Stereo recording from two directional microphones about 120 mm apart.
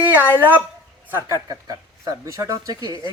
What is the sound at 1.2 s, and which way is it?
Speech, 30° right (ahead or behind).